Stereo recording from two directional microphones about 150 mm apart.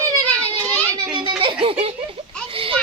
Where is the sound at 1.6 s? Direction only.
40° right (ahead or behind).